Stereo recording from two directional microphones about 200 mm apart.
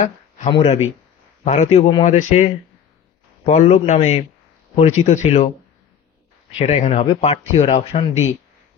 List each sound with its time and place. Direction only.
0.0 s speech: 30° left (ahead or behind)
6.6 s speech: 35° left (ahead or behind)